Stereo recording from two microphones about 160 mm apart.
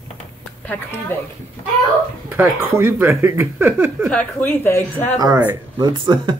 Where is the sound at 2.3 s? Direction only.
15° right (ahead or behind).